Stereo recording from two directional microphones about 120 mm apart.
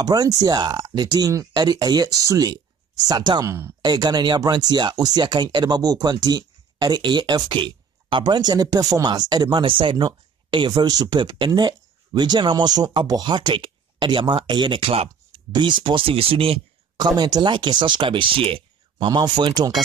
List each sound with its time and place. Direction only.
0.0 s speech: 35° right (ahead or behind); by 15.4 s 50° right (ahead or behind)
15.5 s speech: 40° right (ahead or behind)
17.0 s speech: 35° right (ahead or behind)